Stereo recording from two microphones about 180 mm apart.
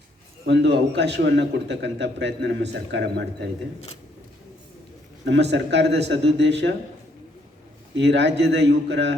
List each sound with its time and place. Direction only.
0.4 s a man's voice: 75° right (ahead or behind)
5.2 s a man's voice: 75° right (ahead or behind)
7.9 s a man's voice: 75° right (ahead or behind)